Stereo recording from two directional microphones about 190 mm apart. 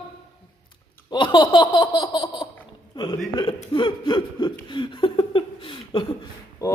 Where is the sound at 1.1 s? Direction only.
25° left (ahead or behind).